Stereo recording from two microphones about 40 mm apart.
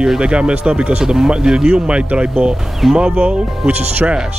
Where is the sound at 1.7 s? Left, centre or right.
Right.